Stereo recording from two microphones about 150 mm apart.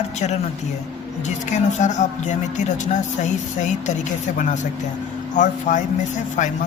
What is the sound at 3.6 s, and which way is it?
Speech, 55° left (ahead or behind).